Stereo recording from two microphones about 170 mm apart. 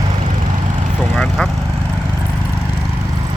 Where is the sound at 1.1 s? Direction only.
5° left (ahead or behind).